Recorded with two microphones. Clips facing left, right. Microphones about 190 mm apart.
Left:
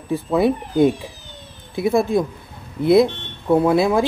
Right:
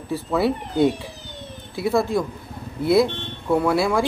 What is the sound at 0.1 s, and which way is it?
Speech, 15° left (ahead or behind).